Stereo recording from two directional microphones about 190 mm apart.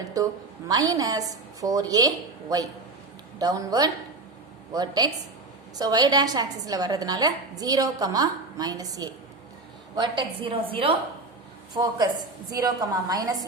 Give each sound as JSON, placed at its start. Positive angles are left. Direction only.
{"t": 0.2, "sound": "a woman's voice", "side_deg": -20}